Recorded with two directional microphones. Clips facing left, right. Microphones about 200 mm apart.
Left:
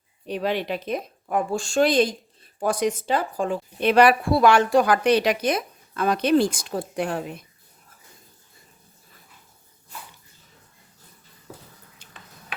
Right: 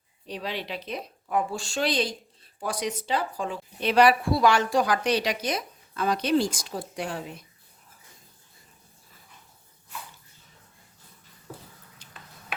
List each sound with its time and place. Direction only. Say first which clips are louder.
0.3 s a woman's voice: left 8 dB; 55° left (ahead or behind)